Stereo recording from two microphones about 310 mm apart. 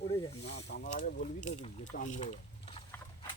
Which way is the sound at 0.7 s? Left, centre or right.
Left.